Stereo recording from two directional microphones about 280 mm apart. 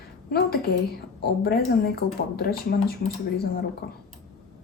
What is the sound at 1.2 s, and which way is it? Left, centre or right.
Speech, left.